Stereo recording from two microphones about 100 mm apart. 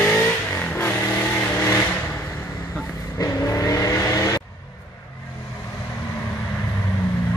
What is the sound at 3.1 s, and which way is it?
Vehicle, 35° left (ahead or behind).